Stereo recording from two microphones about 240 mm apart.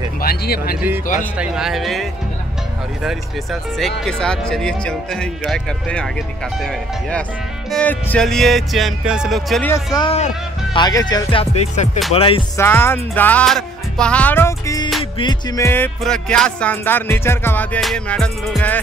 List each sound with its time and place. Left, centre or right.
0.2 s speech: left
1.4 s speech: centre
3.7 s speech: centre
9.9 s speech: left
12.5 s speech: centre